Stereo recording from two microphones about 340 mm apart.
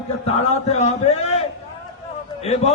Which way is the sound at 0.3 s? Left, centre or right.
Centre.